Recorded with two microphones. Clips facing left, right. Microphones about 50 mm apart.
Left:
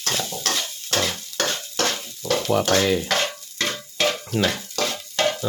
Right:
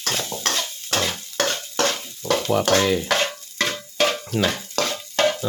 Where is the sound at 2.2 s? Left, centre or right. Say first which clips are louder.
Right 1 dB; centre.